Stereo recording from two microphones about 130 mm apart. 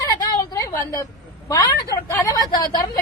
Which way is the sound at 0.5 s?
25° left (ahead or behind).